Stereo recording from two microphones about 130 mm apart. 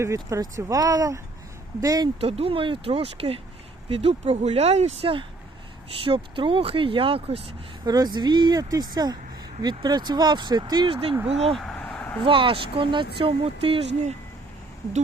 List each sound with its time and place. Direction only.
0.0 s speech: 25° right (ahead or behind)
2.2 s speech: 50° right (ahead or behind)
7.9 s speech: 30° right (ahead or behind); by 11.5 s 50° right (ahead or behind)
11.5 s a sound: 5° left (ahead or behind)
12.2 s speech: 40° right (ahead or behind)